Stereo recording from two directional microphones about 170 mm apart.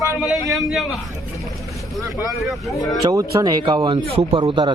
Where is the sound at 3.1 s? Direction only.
20° right (ahead or behind).